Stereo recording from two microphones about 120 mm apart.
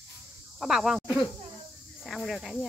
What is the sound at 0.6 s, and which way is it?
Speech, 5° right (ahead or behind).